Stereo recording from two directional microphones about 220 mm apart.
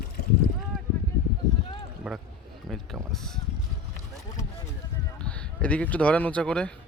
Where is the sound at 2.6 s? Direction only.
Centre (ahead or behind).